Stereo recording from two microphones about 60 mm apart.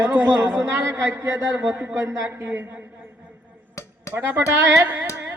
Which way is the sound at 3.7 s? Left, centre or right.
Left.